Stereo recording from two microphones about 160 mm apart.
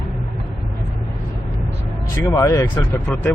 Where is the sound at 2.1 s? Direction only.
20° left (ahead or behind).